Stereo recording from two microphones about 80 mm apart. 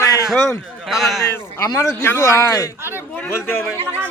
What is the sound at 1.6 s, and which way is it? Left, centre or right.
A man's voice, left.